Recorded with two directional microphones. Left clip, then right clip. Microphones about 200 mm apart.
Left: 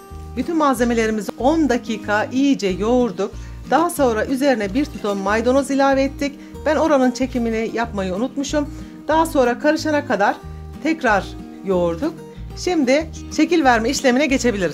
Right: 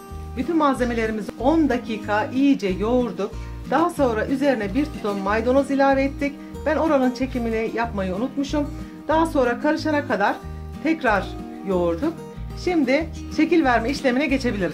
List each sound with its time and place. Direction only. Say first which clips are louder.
0.4 s speech: left 3 dB; 45° left (ahead or behind)